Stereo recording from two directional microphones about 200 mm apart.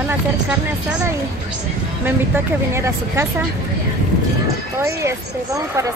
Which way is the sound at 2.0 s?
10° right (ahead or behind).